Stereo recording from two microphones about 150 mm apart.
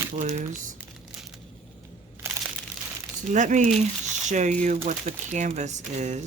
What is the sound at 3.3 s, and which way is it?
Speech, 55° right (ahead or behind).